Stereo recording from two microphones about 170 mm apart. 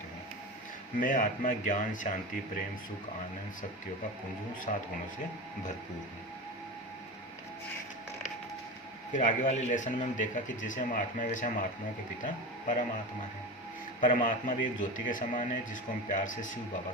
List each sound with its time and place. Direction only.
0.9 s a man's voice: 50° left (ahead or behind)
4.7 s a man's voice: 45° left (ahead or behind)
9.1 s a man's voice: 45° left (ahead or behind)
14.0 s a man's voice: 50° left (ahead or behind)